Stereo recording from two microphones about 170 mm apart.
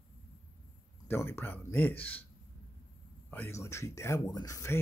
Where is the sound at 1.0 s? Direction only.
15° left (ahead or behind).